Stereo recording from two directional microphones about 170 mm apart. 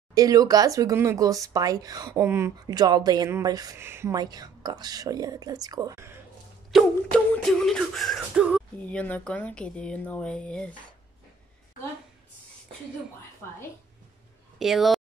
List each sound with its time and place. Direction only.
0.1 s speech: 20° right (ahead or behind)
6.7 s a sound: centre (ahead or behind)
8.8 s speech: 10° left (ahead or behind)
14.6 s a woman's voice: centre (ahead or behind)